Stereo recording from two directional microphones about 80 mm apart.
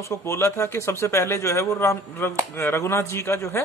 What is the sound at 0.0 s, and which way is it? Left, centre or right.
A man's voice, left.